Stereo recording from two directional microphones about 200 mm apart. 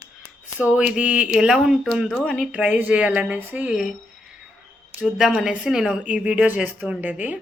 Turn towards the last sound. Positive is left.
turn(degrees=-5)  # may be behind; listen again after turning